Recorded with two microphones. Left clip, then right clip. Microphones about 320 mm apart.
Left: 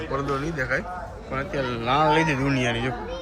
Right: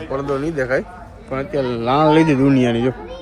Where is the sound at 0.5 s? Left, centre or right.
Centre.